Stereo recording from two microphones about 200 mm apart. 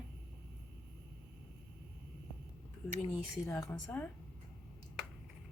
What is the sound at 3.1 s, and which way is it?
Speech, 10° left (ahead or behind).